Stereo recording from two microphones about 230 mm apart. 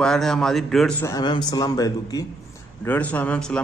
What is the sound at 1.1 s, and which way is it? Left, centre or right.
A man's voice, centre.